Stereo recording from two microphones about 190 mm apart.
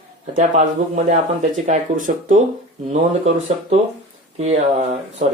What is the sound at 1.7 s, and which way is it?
Speech, 45° right (ahead or behind).